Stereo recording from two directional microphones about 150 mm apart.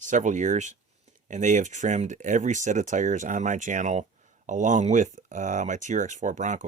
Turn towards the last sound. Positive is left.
turn(degrees=-55)  # may be behind; listen again after turning